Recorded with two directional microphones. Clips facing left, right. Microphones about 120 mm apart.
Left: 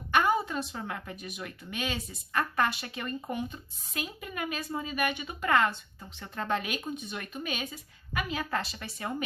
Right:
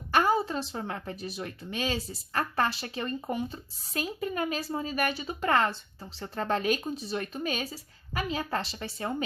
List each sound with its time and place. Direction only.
0.1 s a woman's voice: 35° right (ahead or behind)